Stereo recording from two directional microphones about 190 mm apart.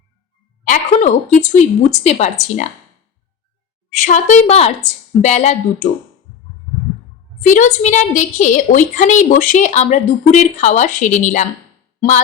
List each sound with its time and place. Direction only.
0.6 s a sound: 40° left (ahead or behind)
1.4 s a woman's voice: 40° left (ahead or behind)
3.9 s a woman's voice: 40° left (ahead or behind)
7.4 s a woman's voice: 40° left (ahead or behind)